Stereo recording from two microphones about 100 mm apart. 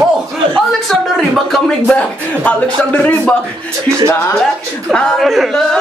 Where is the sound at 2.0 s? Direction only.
15° left (ahead or behind).